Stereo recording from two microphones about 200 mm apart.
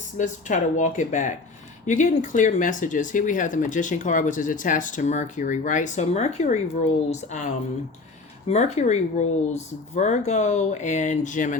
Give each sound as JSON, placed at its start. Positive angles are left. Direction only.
{"t": 0.2, "sound": "speech", "side_deg": 40}